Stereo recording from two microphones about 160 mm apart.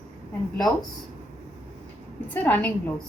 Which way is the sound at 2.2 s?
10° left (ahead or behind).